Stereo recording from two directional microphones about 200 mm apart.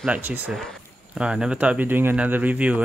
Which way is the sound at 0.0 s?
5° right (ahead or behind).